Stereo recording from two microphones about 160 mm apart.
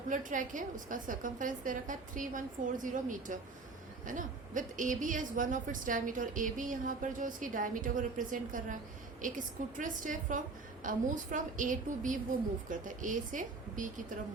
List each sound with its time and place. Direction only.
0.1 s a woman's voice: 55° right (ahead or behind)